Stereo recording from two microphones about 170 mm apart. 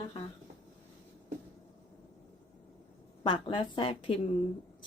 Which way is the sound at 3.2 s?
30° left (ahead or behind).